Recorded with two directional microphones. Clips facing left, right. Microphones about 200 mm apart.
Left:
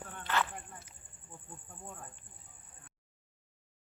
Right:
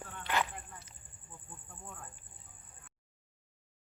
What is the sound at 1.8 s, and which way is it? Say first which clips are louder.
Cricket: left 2 dB; 25° left (ahead or behind).